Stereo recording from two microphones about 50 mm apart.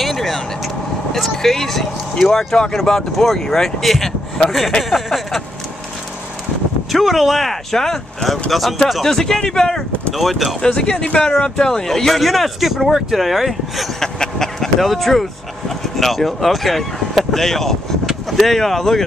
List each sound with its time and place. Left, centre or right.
0.0 s vehicle: centre
1.1 s speech: centre
6.9 s speech: centre
9.0 s speech: centre
10.1 s speech: centre
10.6 s speech: centre
13.9 s speech: centre